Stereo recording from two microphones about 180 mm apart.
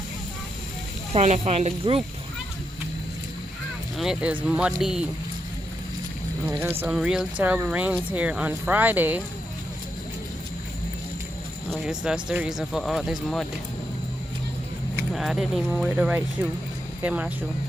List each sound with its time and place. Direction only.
1.1 s speech: 35° right (ahead or behind)
3.9 s speech: 5° right (ahead or behind)
6.4 s speech: 10° right (ahead or behind)
11.8 s speech: 5° right (ahead or behind)
15.1 s speech: centre (ahead or behind)